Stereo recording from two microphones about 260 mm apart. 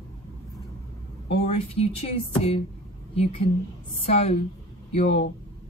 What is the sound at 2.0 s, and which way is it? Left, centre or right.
A woman's voice, left.